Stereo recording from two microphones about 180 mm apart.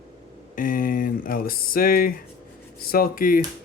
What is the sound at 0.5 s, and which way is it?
Speech, 50° left (ahead or behind).